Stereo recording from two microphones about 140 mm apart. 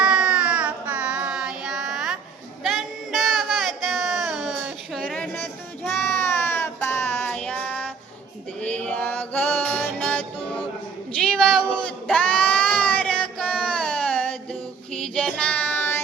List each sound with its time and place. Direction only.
0.0 s music: 5° right (ahead or behind)
2.6 s child singing: centre (ahead or behind)
6.0 s a sound: 15° left (ahead or behind)
6.8 s music: 15° left (ahead or behind)
7.3 s child singing: 10° left (ahead or behind)
8.6 s music: 10° left (ahead or behind)
11.2 s a sound: 5° left (ahead or behind)
14.9 s child singing: 5° left (ahead or behind)